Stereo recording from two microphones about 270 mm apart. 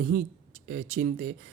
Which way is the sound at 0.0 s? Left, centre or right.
Right.